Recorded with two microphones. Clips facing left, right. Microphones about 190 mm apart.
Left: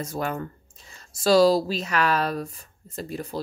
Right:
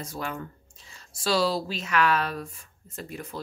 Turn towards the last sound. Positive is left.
turn(degrees=35)  # may be behind; listen again after turning